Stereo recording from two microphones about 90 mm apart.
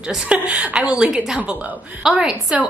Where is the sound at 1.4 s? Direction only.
15° right (ahead or behind).